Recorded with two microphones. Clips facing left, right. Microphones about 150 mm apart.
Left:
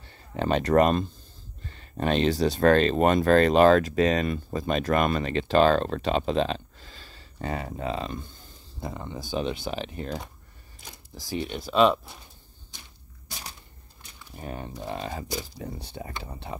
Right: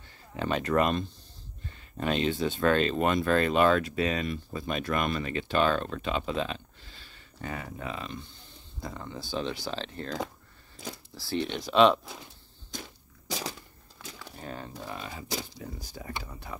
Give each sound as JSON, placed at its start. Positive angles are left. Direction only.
{"t": 0.5, "sound": "speech", "side_deg": 40}
{"t": 5.2, "sound": "speech", "side_deg": 35}
{"t": 8.1, "sound": "a sound", "side_deg": 45}
{"t": 8.8, "sound": "speech", "side_deg": 20}
{"t": 11.1, "sound": "speech", "side_deg": 10}
{"t": 13.3, "sound": "crushing", "side_deg": -90}
{"t": 14.4, "sound": "speech", "side_deg": 15}
{"t": 14.9, "sound": "speech", "side_deg": 40}